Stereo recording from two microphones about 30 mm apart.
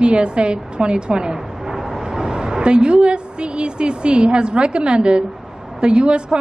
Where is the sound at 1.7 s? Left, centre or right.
Centre; by 3.0 s right.